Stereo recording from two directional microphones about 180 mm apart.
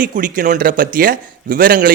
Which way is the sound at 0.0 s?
50° right (ahead or behind).